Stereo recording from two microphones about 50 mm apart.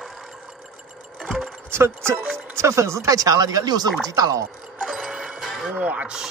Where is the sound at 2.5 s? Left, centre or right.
Right.